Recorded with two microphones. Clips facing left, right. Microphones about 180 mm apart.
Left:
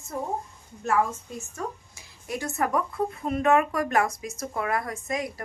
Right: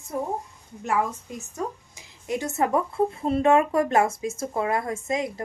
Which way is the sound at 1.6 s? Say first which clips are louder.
Right 4 dB; 15° right (ahead or behind).